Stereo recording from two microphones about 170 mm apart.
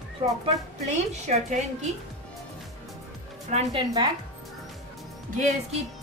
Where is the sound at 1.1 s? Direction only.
40° right (ahead or behind).